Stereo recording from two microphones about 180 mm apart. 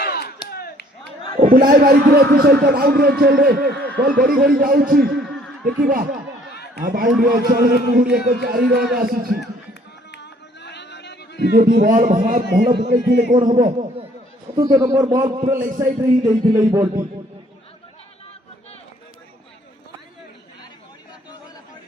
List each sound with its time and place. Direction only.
0.0 s a sound: 60° left (ahead or behind)
1.4 s a man's voice: 50° right (ahead or behind); by 5.2 s 75° right (ahead or behind)
5.2 s a sound: centre (ahead or behind)
5.8 s a man's voice: 55° right (ahead or behind)
10.6 s a sound: 70° left (ahead or behind)
11.5 s a man's voice: 50° right (ahead or behind)
11.9 s a man's voice: 40° right (ahead or behind)
12.9 s speech: 60° right (ahead or behind)
13.6 s a man's voice: 40° right (ahead or behind)
14.6 s a man's voice: 20° right (ahead or behind)
15.5 s a man's voice: 45° right (ahead or behind)
16.2 s speech: 20° right (ahead or behind)